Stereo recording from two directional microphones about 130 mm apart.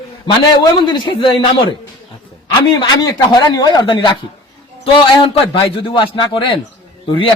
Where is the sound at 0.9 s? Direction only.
40° left (ahead or behind).